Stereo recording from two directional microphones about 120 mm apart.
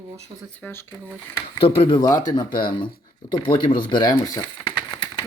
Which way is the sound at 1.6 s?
50° left (ahead or behind).